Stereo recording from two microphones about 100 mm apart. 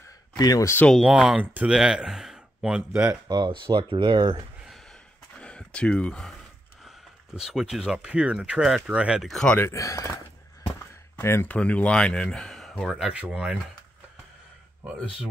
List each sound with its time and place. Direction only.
0.4 s speech: 40° left (ahead or behind)
1.0 s speech: 5° right (ahead or behind)
2.9 s speech: 20° right (ahead or behind)
3.3 s speech: 45° right (ahead or behind)
5.4 s speech: 10° left (ahead or behind)
7.3 s speech: 5° right (ahead or behind)
9.3 s speech: 5° left (ahead or behind)
9.6 s speech: 30° left (ahead or behind)
11.1 s speech: 25° left (ahead or behind)
11.5 s speech: 15° left (ahead or behind); by 13.6 s 10° right (ahead or behind)